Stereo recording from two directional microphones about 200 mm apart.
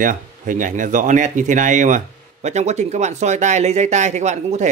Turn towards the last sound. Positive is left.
turn(degrees=-35)  # may be behind; listen again after turning